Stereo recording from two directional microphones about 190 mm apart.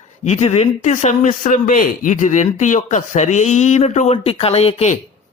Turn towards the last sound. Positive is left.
turn(degrees=35)  # may be behind; listen again after turning